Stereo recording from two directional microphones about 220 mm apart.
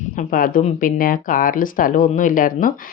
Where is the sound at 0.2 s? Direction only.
40° left (ahead or behind).